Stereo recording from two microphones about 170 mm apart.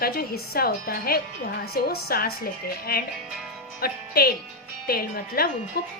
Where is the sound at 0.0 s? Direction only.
65° left (ahead or behind).